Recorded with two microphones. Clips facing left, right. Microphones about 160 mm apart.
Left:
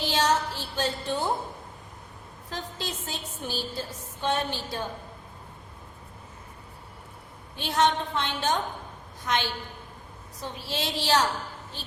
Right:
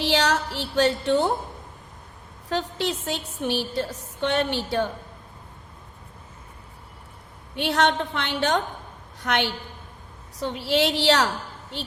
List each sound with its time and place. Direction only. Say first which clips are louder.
0.0 s a sound: right 2 dB; 70° right (ahead or behind)
2.5 s a woman's voice: right 9 dB; 70° right (ahead or behind)
7.5 s a woman's voice: right 2 dB; 70° right (ahead or behind)